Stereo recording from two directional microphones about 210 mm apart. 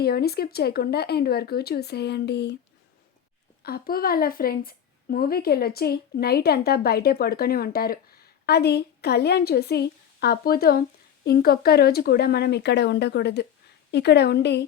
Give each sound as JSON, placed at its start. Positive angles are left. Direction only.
{"t": 0.0, "sound": "a woman's voice", "side_deg": 50}
{"t": 3.6, "sound": "a woman's voice", "side_deg": 45}